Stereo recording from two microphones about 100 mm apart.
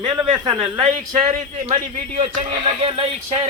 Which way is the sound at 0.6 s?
75° right (ahead or behind).